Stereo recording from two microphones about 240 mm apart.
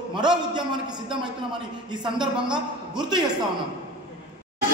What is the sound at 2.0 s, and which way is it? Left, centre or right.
A woman's voice, centre.